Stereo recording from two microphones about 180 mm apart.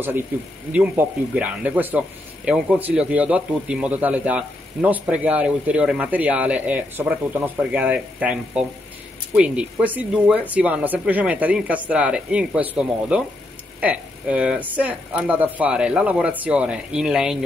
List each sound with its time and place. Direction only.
0.7 s speech: 10° right (ahead or behind)